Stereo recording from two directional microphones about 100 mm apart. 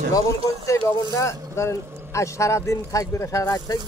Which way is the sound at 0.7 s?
30° left (ahead or behind).